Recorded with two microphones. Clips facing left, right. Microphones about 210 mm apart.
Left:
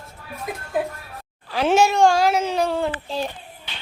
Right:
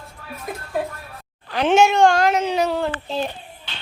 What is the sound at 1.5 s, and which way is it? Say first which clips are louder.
Speech: right 2 dB; 5° left (ahead or behind).